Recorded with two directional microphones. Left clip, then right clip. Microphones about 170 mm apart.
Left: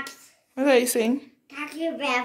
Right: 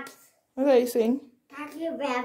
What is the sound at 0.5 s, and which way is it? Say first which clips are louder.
Speech: left 1 dB; 5° right (ahead or behind).